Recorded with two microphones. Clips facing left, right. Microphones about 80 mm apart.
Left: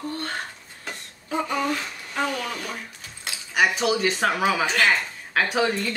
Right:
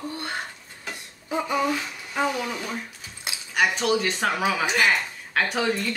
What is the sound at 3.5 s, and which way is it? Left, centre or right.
A woman's voice, centre.